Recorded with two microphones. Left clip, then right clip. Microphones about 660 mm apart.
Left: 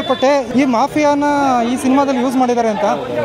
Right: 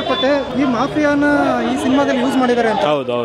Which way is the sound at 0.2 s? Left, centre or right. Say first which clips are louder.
Left 3 dB; left.